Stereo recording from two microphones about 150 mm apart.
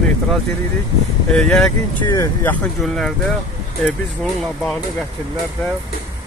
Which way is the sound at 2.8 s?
Centre (ahead or behind).